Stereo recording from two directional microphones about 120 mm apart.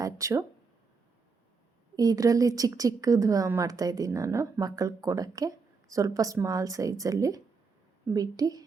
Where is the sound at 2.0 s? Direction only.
30° right (ahead or behind).